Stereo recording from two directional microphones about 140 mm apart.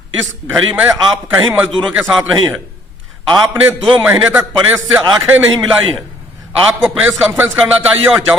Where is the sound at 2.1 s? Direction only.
5° right (ahead or behind).